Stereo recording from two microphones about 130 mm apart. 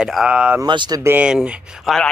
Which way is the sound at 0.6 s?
35° right (ahead or behind).